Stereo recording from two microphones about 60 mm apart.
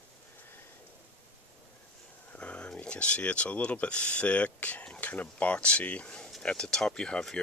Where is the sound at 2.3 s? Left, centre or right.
Centre.